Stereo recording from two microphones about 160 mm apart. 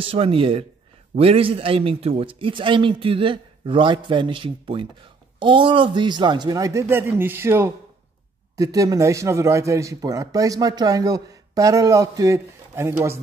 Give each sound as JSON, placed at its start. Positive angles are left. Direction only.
{"t": 0.0, "sound": "a man's voice", "side_deg": -35}